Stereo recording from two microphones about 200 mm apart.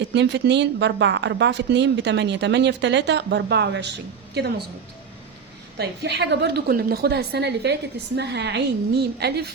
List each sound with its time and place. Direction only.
0.0 s speech: 60° right (ahead or behind)
5.7 s speech: 55° right (ahead or behind)